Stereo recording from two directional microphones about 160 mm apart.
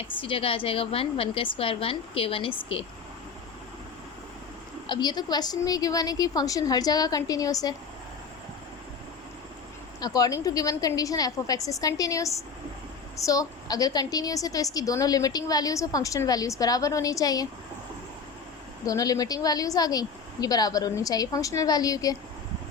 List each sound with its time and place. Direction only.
0.2 s a woman's voice: 35° left (ahead or behind)
4.9 s a woman's voice: 25° left (ahead or behind)
10.0 s a woman's voice: 25° left (ahead or behind)
18.9 s a woman's voice: 20° left (ahead or behind)